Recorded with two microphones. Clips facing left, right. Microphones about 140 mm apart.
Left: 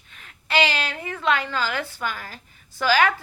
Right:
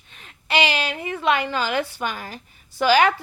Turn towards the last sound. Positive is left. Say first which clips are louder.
# right 3 dB
turn(degrees=-20)  # may be behind; listen again after turning